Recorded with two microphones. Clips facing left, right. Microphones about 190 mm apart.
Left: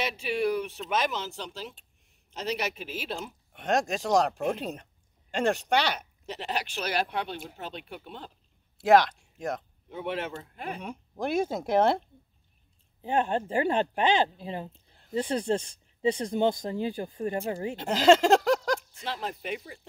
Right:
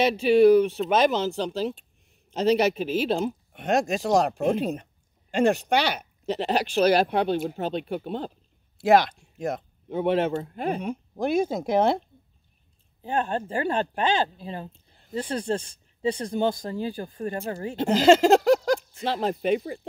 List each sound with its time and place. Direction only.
0.0 s speech: 30° right (ahead or behind)
3.5 s speech: 5° right (ahead or behind)
6.2 s speech: 30° right (ahead or behind)
8.7 s speech: 5° right (ahead or behind)
9.8 s speech: 30° right (ahead or behind)
10.9 s speech: centre (ahead or behind)
13.0 s speech: 20° left (ahead or behind)
17.8 s speech: centre (ahead or behind)
18.9 s speech: 30° right (ahead or behind)